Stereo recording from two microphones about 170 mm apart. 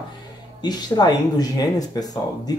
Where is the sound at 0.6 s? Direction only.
25° left (ahead or behind).